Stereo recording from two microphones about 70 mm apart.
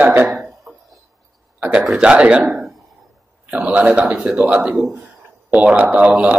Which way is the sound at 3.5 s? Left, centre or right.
Centre.